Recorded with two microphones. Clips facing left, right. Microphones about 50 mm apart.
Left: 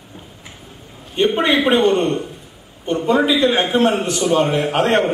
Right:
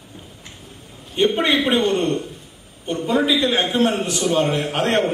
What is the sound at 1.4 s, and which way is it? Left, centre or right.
A man's voice, centre.